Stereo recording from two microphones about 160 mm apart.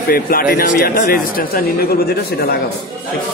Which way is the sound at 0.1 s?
65° left (ahead or behind).